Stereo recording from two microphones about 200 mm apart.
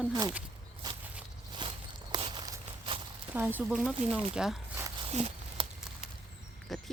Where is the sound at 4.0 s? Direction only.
30° right (ahead or behind).